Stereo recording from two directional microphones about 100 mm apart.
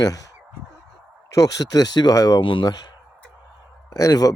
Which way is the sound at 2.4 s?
55° left (ahead or behind).